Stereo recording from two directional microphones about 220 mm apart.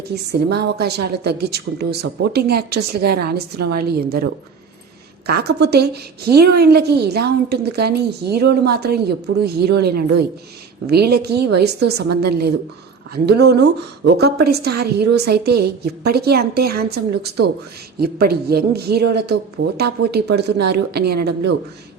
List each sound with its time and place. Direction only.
0.1 s a woman's voice: 45° right (ahead or behind)